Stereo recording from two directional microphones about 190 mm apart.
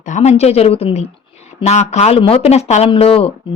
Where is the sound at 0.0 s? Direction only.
40° left (ahead or behind).